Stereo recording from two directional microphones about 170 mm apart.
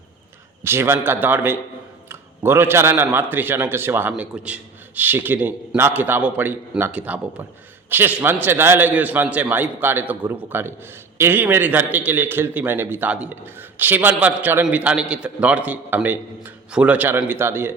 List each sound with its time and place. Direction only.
0.6 s a man's voice: 15° right (ahead or behind)